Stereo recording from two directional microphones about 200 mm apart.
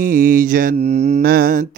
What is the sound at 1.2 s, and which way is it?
Speech, 50° right (ahead or behind).